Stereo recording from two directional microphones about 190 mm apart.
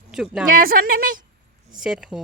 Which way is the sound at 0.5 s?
50° right (ahead or behind).